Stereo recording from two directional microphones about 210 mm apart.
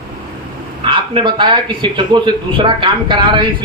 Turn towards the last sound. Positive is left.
turn(degrees=-25)  # may be behind; listen again after turning